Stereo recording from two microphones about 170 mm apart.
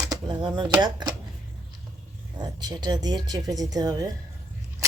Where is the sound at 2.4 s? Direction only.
25° right (ahead or behind).